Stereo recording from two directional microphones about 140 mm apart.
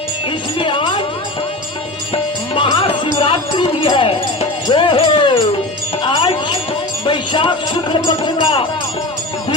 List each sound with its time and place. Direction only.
0.6 s music: 35° left (ahead or behind)
2.6 s music: 35° left (ahead or behind)
3.2 s jingle bell: 40° left (ahead or behind)
6.1 s music: 35° left (ahead or behind)